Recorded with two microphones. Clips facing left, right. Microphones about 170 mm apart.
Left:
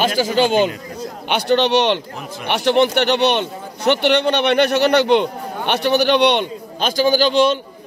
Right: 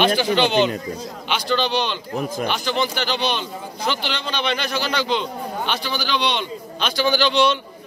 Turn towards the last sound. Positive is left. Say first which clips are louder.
# left 4 dB
turn(degrees=45)  # may be behind; listen again after turning